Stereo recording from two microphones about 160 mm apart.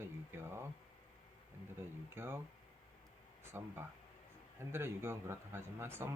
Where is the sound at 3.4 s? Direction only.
15° right (ahead or behind).